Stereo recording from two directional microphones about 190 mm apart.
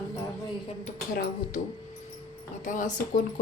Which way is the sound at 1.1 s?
50° left (ahead or behind).